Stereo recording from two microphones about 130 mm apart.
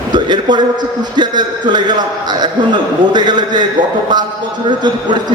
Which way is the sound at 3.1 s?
35° right (ahead or behind).